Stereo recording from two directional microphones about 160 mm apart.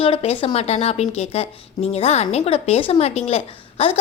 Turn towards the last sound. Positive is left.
turn(degrees=40)  # may be behind; listen again after turning